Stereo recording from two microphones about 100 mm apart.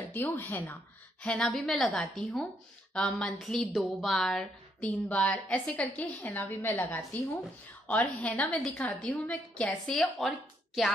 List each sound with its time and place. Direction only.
0.0 s speech: 20° left (ahead or behind)
1.2 s a woman's voice: 5° left (ahead or behind)
2.0 s a woman's voice: 15° left (ahead or behind)
5.1 s a woman's voice: 15° left (ahead or behind)